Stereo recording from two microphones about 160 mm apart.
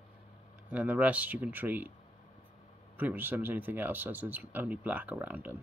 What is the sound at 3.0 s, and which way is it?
Speech, 10° right (ahead or behind).